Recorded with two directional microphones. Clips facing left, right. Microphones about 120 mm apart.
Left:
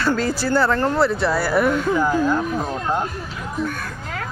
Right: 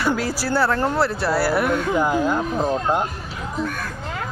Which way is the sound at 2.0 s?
15° right (ahead or behind).